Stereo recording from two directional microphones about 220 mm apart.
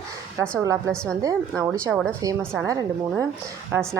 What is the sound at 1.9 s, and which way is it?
Speech, centre (ahead or behind).